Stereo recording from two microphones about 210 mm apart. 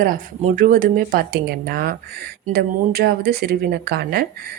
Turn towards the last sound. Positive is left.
turn(degrees=-50)  # may be behind; listen again after turning